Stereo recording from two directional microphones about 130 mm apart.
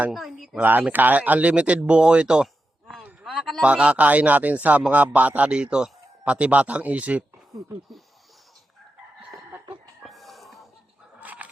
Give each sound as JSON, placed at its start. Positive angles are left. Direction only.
{"t": 0.1, "sound": "speech", "side_deg": 0}
{"t": 0.6, "sound": "speech", "side_deg": -15}
{"t": 3.4, "sound": "speech", "side_deg": 0}
{"t": 3.7, "sound": "a man's voice", "side_deg": -10}
{"t": 10.0, "sound": "a sound", "side_deg": 0}
{"t": 11.2, "sound": "a sound", "side_deg": -15}